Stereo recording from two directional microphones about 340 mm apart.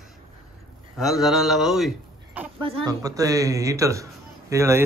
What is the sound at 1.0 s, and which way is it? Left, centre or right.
Speech, centre.